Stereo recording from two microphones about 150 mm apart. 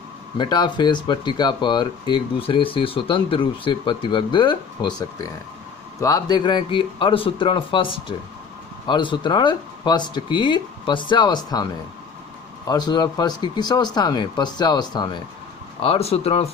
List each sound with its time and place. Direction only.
0.3 s speech: 30° left (ahead or behind)
15.8 s speech: 40° left (ahead or behind)